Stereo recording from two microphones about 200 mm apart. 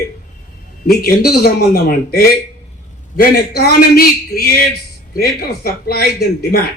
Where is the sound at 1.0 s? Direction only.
50° left (ahead or behind).